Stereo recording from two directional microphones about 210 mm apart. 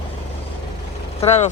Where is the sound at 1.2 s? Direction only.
30° left (ahead or behind).